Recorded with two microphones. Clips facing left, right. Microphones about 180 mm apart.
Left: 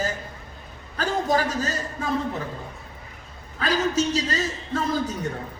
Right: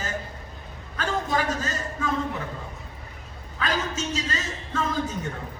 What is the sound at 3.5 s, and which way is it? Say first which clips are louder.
A man's voice: left 5 dB; 40° left (ahead or behind).